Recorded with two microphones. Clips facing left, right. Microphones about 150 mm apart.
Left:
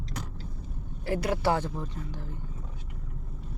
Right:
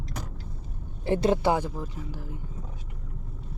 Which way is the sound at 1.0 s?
25° right (ahead or behind).